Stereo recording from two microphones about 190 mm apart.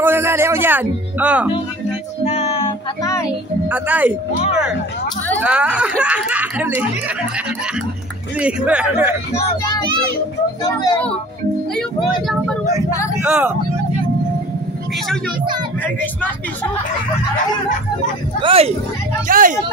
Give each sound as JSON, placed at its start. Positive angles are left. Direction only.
{"t": 0.0, "sound": "speech", "side_deg": -10}
{"t": 2.2, "sound": "music", "side_deg": 35}
{"t": 3.0, "sound": "speech", "side_deg": 20}
{"t": 3.6, "sound": "speech", "side_deg": -10}
{"t": 5.4, "sound": "speech", "side_deg": -5}
{"t": 8.4, "sound": "speech", "side_deg": -5}
{"t": 13.2, "sound": "speech", "side_deg": -10}
{"t": 18.4, "sound": "speech", "side_deg": -30}
{"t": 19.2, "sound": "speech", "side_deg": -45}